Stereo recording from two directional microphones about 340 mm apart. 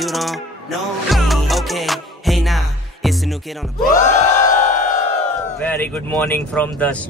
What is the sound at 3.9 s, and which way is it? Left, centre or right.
Crowd, left.